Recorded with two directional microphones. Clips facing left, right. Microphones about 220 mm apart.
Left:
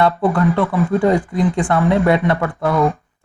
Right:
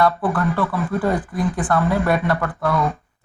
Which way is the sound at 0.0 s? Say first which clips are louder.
Left 4 dB; 25° left (ahead or behind).